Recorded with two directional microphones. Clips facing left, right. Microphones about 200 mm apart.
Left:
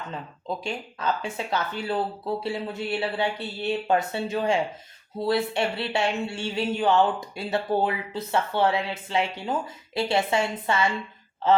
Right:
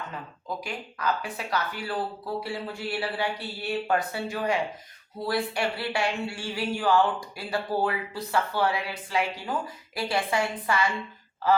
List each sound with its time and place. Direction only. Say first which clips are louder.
0.4 s speech: left 4 dB; 25° left (ahead or behind)